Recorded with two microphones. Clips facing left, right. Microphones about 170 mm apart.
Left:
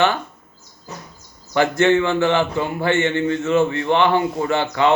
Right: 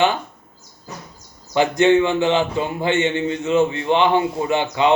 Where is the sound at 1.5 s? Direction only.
15° right (ahead or behind).